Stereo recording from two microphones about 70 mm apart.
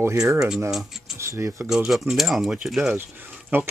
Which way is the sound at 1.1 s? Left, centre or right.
Right.